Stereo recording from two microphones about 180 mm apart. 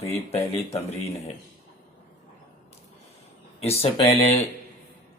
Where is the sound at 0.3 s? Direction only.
35° left (ahead or behind).